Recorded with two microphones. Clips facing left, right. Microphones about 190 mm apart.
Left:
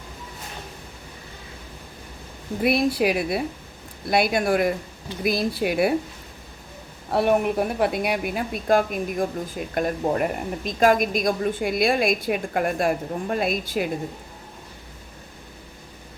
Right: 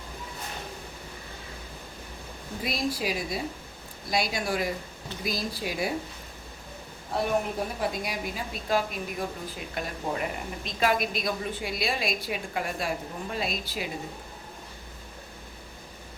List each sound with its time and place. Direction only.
2.6 s a woman's voice: 65° left (ahead or behind)
7.1 s speech: 65° left (ahead or behind)